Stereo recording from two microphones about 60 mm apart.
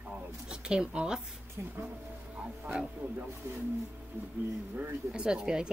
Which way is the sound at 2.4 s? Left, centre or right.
Centre.